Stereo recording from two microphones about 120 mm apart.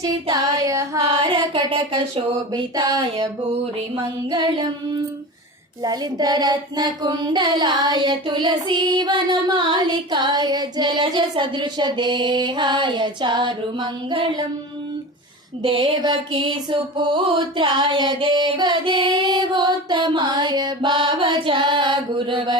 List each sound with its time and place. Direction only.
0.0 s child singing: 30° right (ahead or behind)
1.3 s speech: 45° right (ahead or behind)
2.6 s child singing: 35° right (ahead or behind)
4.3 s child singing: 35° right (ahead or behind)
5.8 s child singing: 35° right (ahead or behind)
15.6 s child singing: 50° right (ahead or behind)